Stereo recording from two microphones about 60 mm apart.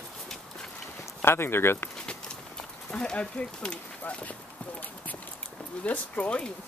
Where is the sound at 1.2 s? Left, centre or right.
Left.